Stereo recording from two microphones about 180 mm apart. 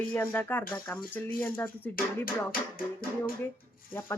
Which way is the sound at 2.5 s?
55° left (ahead or behind).